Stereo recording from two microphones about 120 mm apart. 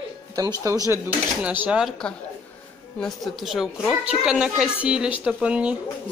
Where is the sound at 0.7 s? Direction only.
25° right (ahead or behind).